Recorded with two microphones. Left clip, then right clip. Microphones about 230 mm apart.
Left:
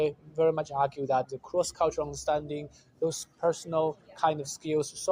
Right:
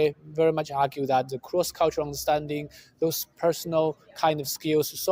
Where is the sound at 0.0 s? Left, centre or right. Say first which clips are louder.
Right 3 dB; right.